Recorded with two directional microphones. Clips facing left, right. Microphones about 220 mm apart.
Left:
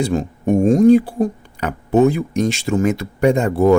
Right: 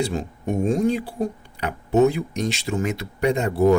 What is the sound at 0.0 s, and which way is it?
Speech, 50° left (ahead or behind).